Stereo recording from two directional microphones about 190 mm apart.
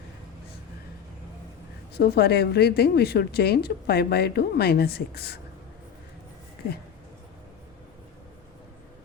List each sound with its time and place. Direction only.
2.0 s a woman's voice: 55° left (ahead or behind)